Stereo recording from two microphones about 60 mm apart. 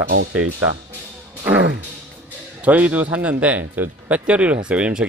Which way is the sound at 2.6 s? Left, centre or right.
Right.